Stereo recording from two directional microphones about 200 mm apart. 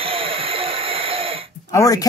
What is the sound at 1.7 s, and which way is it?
Speech, 15° left (ahead or behind).